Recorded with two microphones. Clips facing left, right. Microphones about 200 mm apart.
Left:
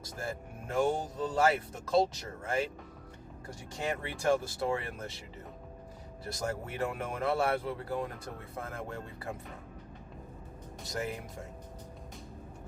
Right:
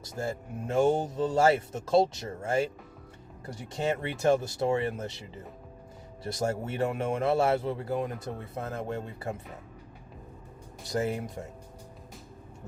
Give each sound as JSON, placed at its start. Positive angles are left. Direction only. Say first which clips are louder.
{"t": 0.2, "sound": "speech", "louder": "right 6 dB", "side_deg": -25}
{"t": 3.8, "sound": "speech", "louder": "right 6 dB", "side_deg": -25}
{"t": 6.2, "sound": "speech", "louder": "right 6 dB", "side_deg": -25}
{"t": 10.9, "sound": "speech", "louder": "right 7 dB", "side_deg": -30}